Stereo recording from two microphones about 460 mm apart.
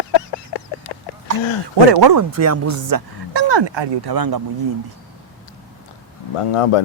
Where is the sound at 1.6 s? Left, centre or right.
Right.